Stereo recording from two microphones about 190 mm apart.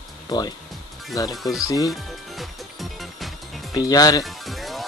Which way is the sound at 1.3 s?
Centre (ahead or behind).